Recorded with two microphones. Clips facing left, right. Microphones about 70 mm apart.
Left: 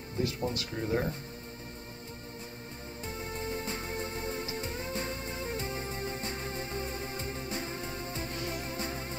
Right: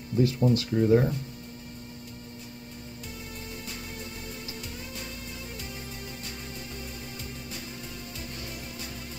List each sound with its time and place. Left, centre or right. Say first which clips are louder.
0.2 s speech: right 9 dB; centre
3.2 s music: left 5 dB; left